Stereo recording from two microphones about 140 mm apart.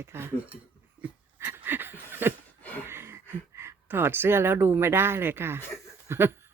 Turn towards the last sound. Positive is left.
turn(degrees=-15)  # may be behind; listen again after turning